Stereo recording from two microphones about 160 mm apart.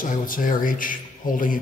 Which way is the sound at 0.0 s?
60° left (ahead or behind).